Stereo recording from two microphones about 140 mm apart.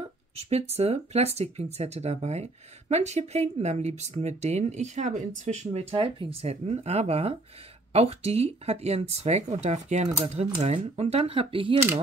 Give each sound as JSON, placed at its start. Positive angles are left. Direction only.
{"t": 0.0, "sound": "speech", "side_deg": -45}